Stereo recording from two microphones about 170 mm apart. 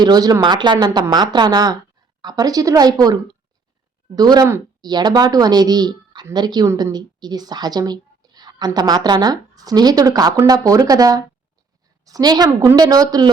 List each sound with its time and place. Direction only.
0.0 s a woman's voice: 25° right (ahead or behind)